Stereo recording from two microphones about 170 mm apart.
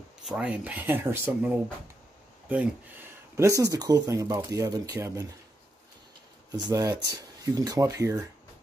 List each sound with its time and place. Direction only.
0.2 s speech: 5° right (ahead or behind)
6.6 s speech: 20° right (ahead or behind)